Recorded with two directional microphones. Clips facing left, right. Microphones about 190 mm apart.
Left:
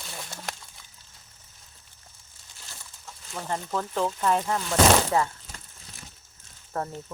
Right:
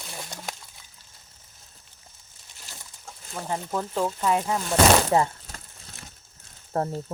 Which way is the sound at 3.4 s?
10° right (ahead or behind).